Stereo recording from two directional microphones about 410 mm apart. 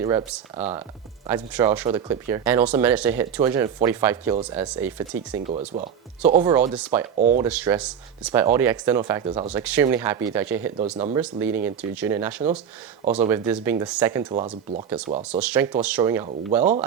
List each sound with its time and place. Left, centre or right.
0.0 s speech: centre
7.2 s speech: centre
7.4 s speech: centre